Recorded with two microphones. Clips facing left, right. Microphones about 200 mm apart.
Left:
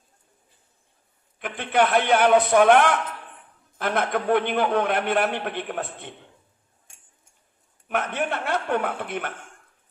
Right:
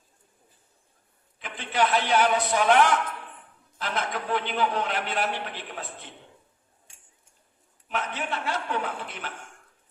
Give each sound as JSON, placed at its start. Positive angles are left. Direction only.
{"t": 1.4, "sound": "a man's voice", "side_deg": 55}
{"t": 7.9, "sound": "a man's voice", "side_deg": 55}